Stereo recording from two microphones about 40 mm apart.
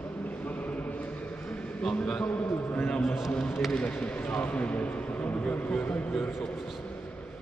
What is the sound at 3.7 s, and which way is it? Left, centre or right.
A man's voice, left.